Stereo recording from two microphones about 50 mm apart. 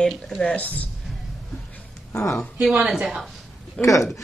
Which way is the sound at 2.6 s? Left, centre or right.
Centre.